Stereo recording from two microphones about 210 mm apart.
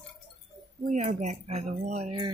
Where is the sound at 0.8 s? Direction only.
35° right (ahead or behind).